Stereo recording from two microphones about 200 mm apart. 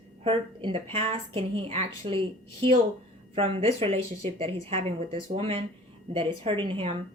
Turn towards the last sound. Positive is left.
turn(degrees=-25)  # may be behind; listen again after turning